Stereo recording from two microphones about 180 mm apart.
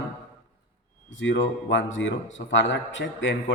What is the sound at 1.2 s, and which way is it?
A man's voice, 90° left.